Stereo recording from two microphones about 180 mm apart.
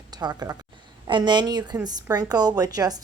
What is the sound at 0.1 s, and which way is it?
A woman's voice, 20° right (ahead or behind).